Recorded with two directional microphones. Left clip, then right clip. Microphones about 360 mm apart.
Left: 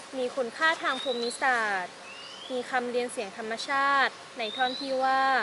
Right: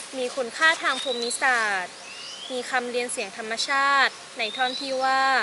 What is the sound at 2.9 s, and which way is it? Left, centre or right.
Speech, centre.